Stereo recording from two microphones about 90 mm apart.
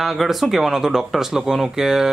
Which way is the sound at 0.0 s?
5° right (ahead or behind).